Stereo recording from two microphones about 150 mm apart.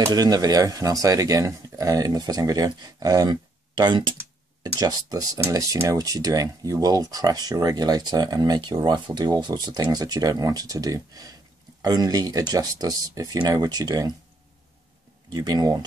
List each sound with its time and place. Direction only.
0.0 s speech: 25° right (ahead or behind)
15.2 s speech: 30° right (ahead or behind)